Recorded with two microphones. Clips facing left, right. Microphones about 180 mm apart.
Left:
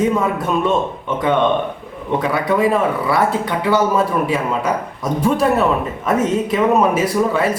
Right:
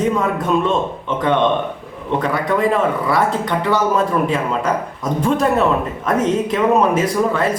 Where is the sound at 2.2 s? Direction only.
5° left (ahead or behind).